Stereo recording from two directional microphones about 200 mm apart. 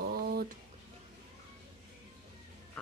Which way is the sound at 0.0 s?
50° right (ahead or behind).